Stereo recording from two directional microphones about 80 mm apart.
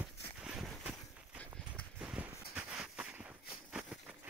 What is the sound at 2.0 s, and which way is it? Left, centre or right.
Clip-clop, centre.